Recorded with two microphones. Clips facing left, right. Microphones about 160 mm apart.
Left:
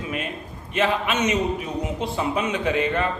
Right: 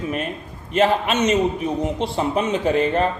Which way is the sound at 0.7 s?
35° right (ahead or behind).